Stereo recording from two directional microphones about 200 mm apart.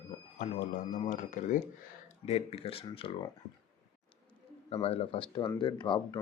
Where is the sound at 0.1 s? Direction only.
35° left (ahead or behind).